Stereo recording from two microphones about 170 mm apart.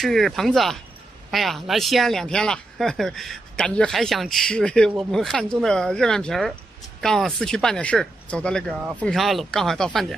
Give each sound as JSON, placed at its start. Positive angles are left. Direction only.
{"t": 0.0, "sound": "speech", "side_deg": 0}